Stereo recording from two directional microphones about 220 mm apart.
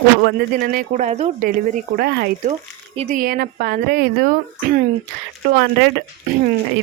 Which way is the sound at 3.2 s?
40° right (ahead or behind).